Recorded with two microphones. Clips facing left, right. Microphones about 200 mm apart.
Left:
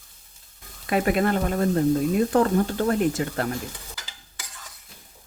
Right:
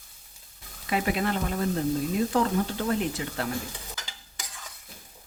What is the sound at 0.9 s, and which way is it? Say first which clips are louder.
Speech: left 5 dB; 50° left (ahead or behind).